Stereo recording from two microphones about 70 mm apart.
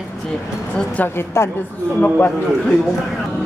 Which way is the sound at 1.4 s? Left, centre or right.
Left.